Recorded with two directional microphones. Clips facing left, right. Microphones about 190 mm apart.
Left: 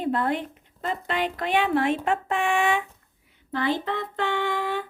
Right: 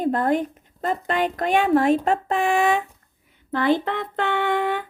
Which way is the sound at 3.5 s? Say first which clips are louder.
Right 5 dB; 55° right (ahead or behind).